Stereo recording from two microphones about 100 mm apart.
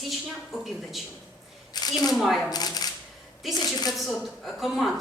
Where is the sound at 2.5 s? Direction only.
40° left (ahead or behind).